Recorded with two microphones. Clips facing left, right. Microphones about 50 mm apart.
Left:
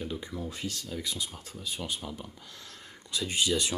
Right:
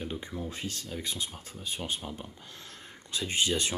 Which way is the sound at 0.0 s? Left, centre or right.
Right.